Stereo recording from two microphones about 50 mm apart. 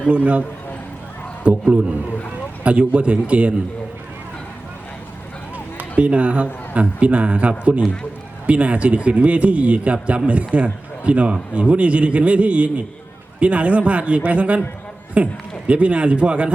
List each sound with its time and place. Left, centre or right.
0.1 s a man's voice: right
1.5 s a man's voice: right
5.7 s a man's voice: right